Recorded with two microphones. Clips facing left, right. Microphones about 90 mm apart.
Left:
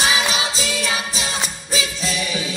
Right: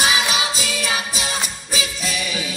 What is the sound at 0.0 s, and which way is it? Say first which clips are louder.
Music: even; 35° left (ahead or behind).